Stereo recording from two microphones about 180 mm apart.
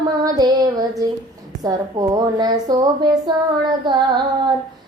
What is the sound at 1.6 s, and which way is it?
Speech, 20° right (ahead or behind).